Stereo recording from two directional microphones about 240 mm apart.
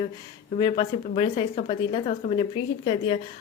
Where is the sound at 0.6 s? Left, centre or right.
Left.